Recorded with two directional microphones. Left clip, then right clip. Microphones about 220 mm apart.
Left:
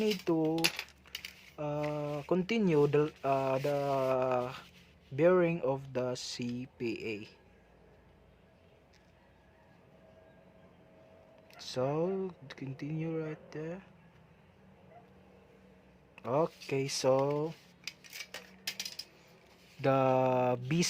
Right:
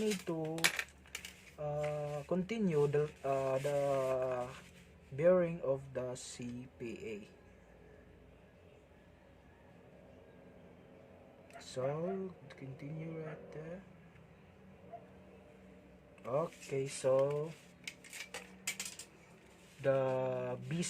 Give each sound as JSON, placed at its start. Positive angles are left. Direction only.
{"t": 0.0, "sound": "coin", "side_deg": 50}
{"t": 1.5, "sound": "speech", "side_deg": 50}
{"t": 11.6, "sound": "speech", "side_deg": 45}
{"t": 16.2, "sound": "speech", "side_deg": 50}
{"t": 19.8, "sound": "speech", "side_deg": 50}